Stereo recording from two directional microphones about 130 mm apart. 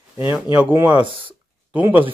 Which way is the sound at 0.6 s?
15° right (ahead or behind).